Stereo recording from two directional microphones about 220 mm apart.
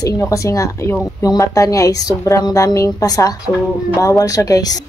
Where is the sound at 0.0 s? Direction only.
15° left (ahead or behind).